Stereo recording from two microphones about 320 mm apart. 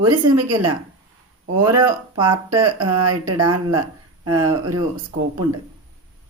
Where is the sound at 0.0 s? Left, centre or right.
Centre.